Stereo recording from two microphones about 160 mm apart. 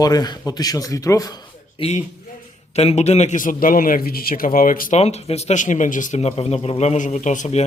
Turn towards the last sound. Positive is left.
turn(degrees=45)  # may be behind; listen again after turning